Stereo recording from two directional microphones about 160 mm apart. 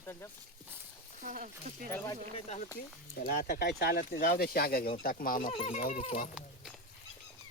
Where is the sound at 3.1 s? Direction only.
70° left (ahead or behind).